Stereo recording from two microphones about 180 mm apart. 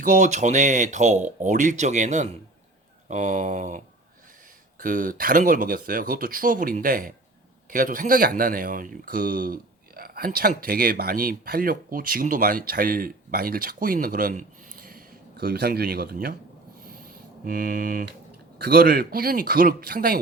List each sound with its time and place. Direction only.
0.0 s speech: 45° right (ahead or behind)
4.8 s speech: 50° right (ahead or behind)
16.8 s a sound: 55° right (ahead or behind)
18.6 s speech: 60° right (ahead or behind)